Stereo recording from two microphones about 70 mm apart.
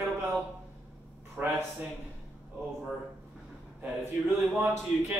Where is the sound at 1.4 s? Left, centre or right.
Centre.